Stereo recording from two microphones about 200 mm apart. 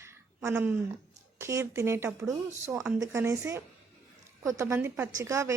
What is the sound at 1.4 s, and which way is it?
A woman's voice, 15° right (ahead or behind).